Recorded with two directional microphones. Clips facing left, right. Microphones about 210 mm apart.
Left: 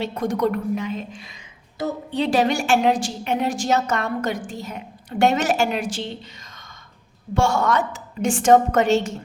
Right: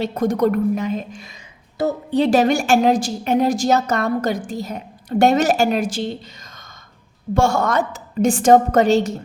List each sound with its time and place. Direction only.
0.0 s a woman's voice: 40° right (ahead or behind)
7.3 s a woman's voice: 40° right (ahead or behind)